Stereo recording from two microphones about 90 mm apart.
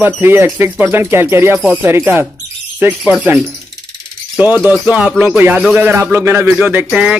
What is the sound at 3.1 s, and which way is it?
Speech, 15° right (ahead or behind).